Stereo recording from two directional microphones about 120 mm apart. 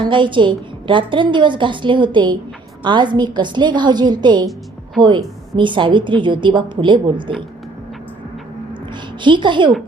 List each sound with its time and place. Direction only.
0.0 s a woman's voice: 40° right (ahead or behind)
9.2 s a woman's voice: 40° right (ahead or behind)